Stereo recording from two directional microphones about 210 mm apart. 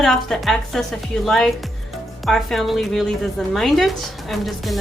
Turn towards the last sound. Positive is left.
turn(degrees=0)  # may be behind; listen again after turning